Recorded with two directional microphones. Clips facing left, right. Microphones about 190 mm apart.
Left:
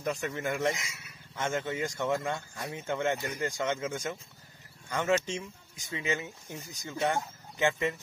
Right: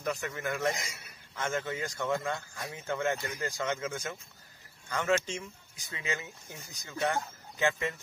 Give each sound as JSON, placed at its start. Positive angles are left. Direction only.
{"t": 0.0, "sound": "speech", "side_deg": 25}
{"t": 0.7, "sound": "a man's voice", "side_deg": -40}
{"t": 1.3, "sound": "speech", "side_deg": 20}